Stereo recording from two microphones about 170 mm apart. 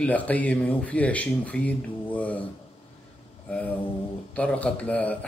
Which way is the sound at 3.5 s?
10° left (ahead or behind).